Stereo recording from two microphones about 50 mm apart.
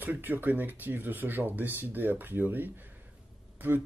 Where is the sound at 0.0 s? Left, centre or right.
Right.